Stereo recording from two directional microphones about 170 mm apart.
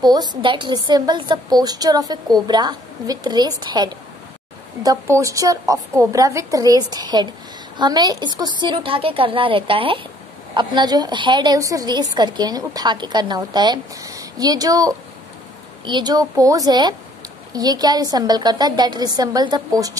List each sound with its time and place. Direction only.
0.0 s a woman's voice: 25° right (ahead or behind)